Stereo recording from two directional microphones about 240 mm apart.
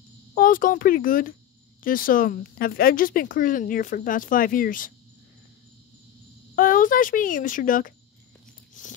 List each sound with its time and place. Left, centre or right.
0.3 s speech: left
6.5 s speech: left